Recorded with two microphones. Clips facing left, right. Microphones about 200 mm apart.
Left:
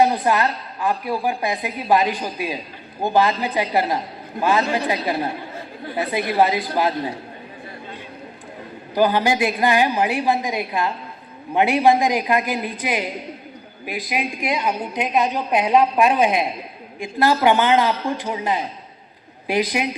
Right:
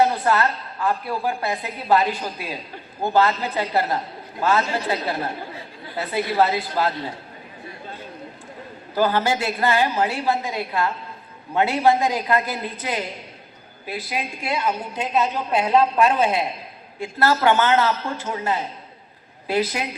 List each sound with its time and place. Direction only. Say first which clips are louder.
0.0 s a woman's voice: left 1 dB; 15° left (ahead or behind)
6.0 s a woman's voice: left 2 dB; 15° left (ahead or behind)
9.0 s a woman's voice: left 3 dB; 15° left (ahead or behind)